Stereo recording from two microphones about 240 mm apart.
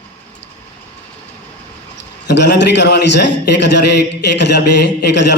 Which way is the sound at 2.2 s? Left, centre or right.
Left.